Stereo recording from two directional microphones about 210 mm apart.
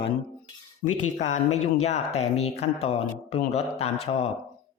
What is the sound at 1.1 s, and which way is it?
Speech, 35° left (ahead or behind).